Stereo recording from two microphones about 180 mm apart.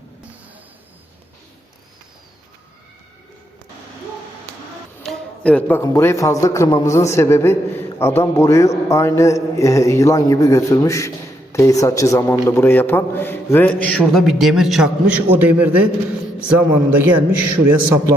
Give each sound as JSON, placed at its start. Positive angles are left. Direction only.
{"t": 5.0, "sound": "a man's voice", "side_deg": 5}